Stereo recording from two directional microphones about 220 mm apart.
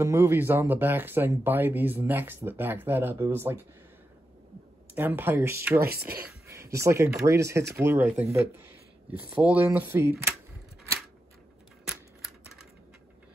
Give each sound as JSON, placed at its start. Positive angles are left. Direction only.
{"t": 0.0, "sound": "speech", "side_deg": -10}
{"t": 4.9, "sound": "speech", "side_deg": -10}
{"t": 5.8, "sound": "speech", "side_deg": -45}
{"t": 6.4, "sound": "a sound", "side_deg": -10}
{"t": 7.2, "sound": "speech", "side_deg": -15}
{"t": 11.8, "sound": "typewriter", "side_deg": -5}